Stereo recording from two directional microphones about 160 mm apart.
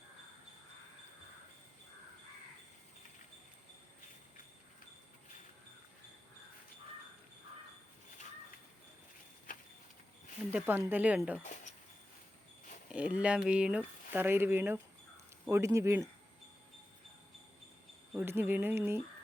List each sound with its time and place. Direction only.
10.5 s speech: 10° right (ahead or behind)
12.9 s speech: 10° right (ahead or behind)
18.1 s speech: 10° right (ahead or behind)